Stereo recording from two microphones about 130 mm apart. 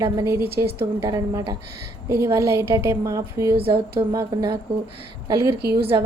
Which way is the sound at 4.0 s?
30° right (ahead or behind).